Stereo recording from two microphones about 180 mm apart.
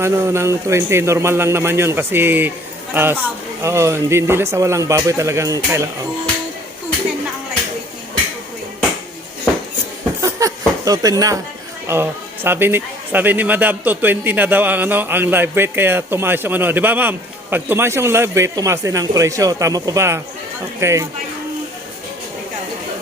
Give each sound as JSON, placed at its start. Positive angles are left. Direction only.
{"t": 0.0, "sound": "speech", "side_deg": -15}
{"t": 10.2, "sound": "a sound", "side_deg": -20}
{"t": 10.8, "sound": "speech", "side_deg": -20}